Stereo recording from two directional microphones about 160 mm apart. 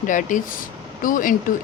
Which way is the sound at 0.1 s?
55° left (ahead or behind).